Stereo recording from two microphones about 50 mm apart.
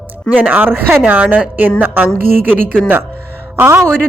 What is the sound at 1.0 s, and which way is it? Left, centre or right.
Speech, right.